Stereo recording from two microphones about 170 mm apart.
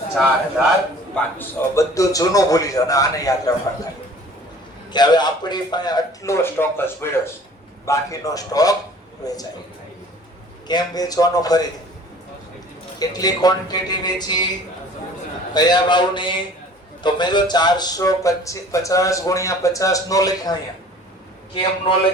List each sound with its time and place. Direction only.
1.1 s a man's voice: 15° left (ahead or behind)
4.9 s a man's voice: 25° left (ahead or behind)
10.7 s a man's voice: 25° left (ahead or behind)
13.0 s a man's voice: 20° left (ahead or behind)
15.5 s a man's voice: 25° left (ahead or behind)